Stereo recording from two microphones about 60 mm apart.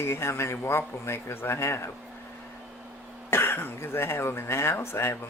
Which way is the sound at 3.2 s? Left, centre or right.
Left.